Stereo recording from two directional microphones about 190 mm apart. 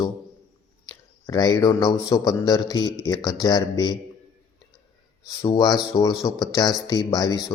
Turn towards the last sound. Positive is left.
turn(degrees=20)  # may be behind; listen again after turning